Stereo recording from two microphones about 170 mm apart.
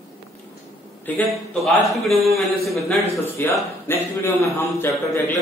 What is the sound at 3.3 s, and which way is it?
A man's voice, 15° left (ahead or behind).